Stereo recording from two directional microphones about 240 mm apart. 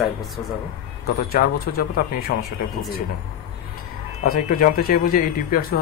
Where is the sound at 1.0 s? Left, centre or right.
Left.